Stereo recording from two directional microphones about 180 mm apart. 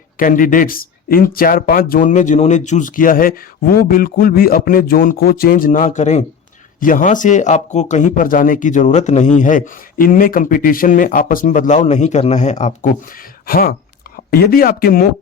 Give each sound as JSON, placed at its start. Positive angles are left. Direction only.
{"t": 0.2, "sound": "speech", "side_deg": 50}
{"t": 13.5, "sound": "speech", "side_deg": 55}